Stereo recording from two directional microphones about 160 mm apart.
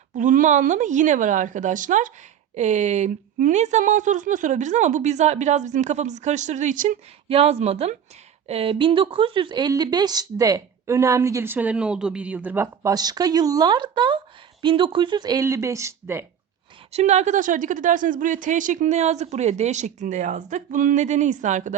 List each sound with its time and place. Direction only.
0.2 s speech: 50° right (ahead or behind)
7.3 s speech: 40° right (ahead or behind); by 16.2 s 15° right (ahead or behind)
16.9 s speech: 45° right (ahead or behind)